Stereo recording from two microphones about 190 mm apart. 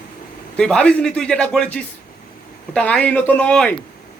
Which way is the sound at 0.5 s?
5° left (ahead or behind).